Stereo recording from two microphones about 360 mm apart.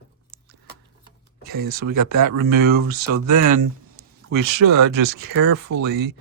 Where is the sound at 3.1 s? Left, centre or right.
Right.